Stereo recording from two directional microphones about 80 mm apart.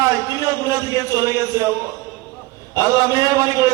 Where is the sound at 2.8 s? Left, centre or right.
Right.